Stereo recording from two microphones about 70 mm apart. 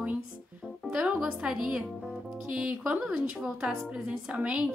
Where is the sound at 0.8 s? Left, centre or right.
Centre.